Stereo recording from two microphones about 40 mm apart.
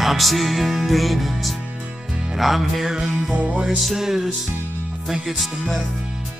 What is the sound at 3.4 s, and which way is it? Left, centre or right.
Music, right.